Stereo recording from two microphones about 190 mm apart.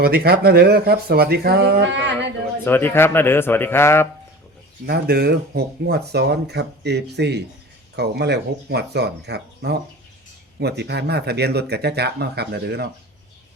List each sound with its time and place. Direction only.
0.0 s speech: 55° right (ahead or behind)
2.6 s speech: 10° left (ahead or behind)
4.9 s speech: 55° right (ahead or behind)